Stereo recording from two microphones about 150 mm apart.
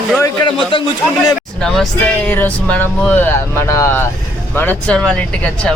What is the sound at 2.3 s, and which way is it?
Speech, 10° left (ahead or behind).